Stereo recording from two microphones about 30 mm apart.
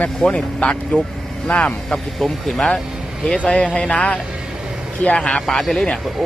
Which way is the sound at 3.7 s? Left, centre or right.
Left.